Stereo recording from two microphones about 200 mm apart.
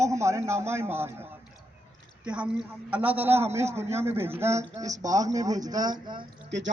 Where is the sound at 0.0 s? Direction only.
15° right (ahead or behind).